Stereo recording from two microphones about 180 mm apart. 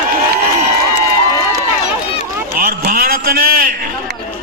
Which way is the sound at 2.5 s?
50° right (ahead or behind).